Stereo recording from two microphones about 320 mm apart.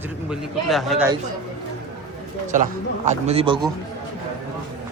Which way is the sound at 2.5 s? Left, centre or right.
Right.